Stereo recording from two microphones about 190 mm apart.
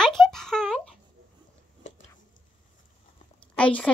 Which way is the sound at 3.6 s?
5° left (ahead or behind).